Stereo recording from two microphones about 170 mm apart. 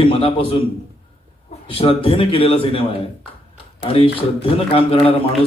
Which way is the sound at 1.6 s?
35° left (ahead or behind).